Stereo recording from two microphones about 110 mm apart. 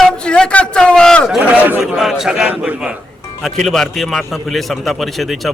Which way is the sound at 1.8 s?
5° right (ahead or behind).